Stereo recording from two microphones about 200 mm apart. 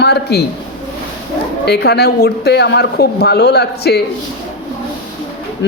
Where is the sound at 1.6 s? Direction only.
55° left (ahead or behind).